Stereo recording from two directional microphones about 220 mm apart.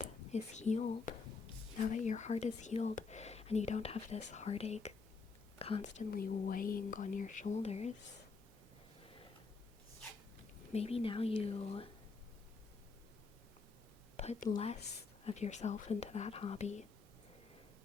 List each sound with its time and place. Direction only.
0.0 s speech: 30° left (ahead or behind)
10.7 s a woman's voice: 30° left (ahead or behind)
14.2 s a woman's voice: 30° left (ahead or behind)